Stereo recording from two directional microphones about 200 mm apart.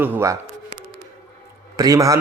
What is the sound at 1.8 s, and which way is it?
Speech, 15° right (ahead or behind).